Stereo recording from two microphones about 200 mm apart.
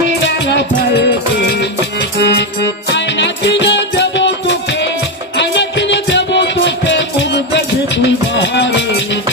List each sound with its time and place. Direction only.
0.2 s music: 60° left (ahead or behind)
5.5 s music: 60° left (ahead or behind)